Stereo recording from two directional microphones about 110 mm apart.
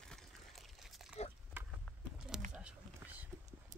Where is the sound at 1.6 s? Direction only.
20° right (ahead or behind).